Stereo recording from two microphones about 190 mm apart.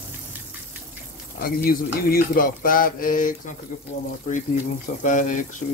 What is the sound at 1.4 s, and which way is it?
Speech, 55° left (ahead or behind).